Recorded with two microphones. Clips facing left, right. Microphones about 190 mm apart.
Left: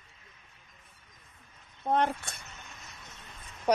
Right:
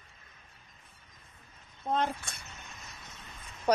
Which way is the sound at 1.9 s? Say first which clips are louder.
Left 3 dB; 60° left (ahead or behind).